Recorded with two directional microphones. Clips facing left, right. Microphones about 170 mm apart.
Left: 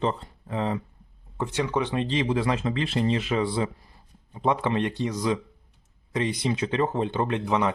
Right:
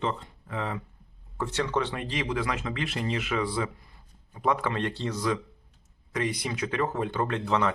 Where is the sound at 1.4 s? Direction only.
15° left (ahead or behind).